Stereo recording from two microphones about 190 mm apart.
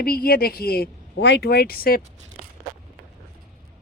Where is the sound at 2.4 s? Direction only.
40° right (ahead or behind).